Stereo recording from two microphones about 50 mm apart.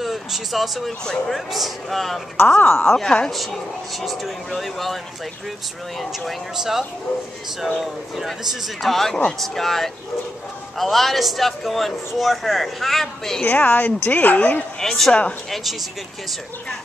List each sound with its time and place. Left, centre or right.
0.0 s speech: centre
1.0 s speech: centre
1.5 s speech: centre
2.3 s speech: left
2.9 s speech: centre
4.0 s speech: centre
6.5 s speech: centre
13.5 s speech: left
14.8 s speech: centre